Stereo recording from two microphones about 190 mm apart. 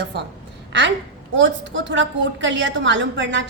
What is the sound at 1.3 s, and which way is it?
A woman's voice, 75° right (ahead or behind).